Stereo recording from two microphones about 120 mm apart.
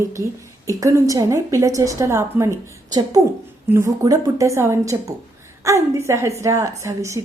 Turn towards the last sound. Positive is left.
turn(degrees=-25)  # may be behind; listen again after turning